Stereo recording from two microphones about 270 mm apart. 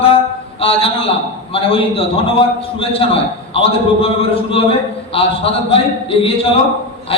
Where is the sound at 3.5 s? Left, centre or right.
Left.